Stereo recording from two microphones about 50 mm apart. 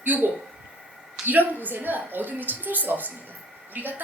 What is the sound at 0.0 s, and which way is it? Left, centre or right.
A woman's voice, right.